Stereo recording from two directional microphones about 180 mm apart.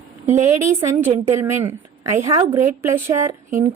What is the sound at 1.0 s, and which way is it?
A woman's voice, 15° right (ahead or behind).